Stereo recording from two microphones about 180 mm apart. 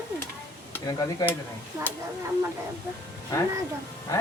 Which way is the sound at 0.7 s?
20° left (ahead or behind).